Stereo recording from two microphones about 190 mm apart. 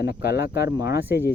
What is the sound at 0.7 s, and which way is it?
Speech, 15° right (ahead or behind).